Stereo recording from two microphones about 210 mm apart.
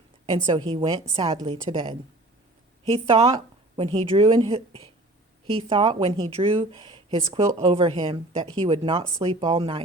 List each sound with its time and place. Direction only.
0.7 s a woman's voice: 25° right (ahead or behind)